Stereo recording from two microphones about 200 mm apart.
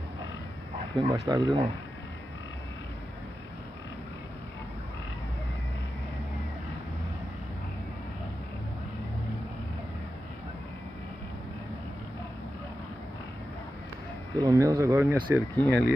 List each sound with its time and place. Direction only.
0.9 s speech: 20° right (ahead or behind)
14.4 s speech: 15° right (ahead or behind)
15.5 s speech: 5° left (ahead or behind)